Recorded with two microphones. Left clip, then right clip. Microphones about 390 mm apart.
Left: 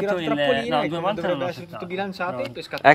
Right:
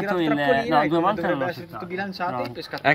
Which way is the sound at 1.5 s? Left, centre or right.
Centre.